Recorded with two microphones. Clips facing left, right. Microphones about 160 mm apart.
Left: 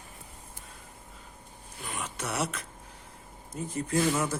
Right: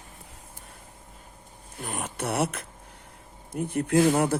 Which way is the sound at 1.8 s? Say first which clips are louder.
Right 5 dB; 50° right (ahead or behind).